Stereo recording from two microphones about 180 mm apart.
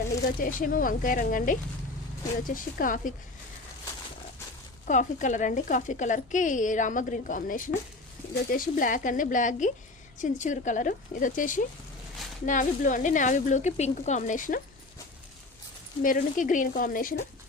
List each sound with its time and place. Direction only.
0.3 s speech: 50° left (ahead or behind)
4.9 s speech: 45° left (ahead or behind)
16.0 s speech: 45° left (ahead or behind)